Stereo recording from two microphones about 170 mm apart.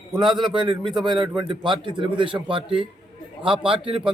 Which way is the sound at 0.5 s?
30° right (ahead or behind).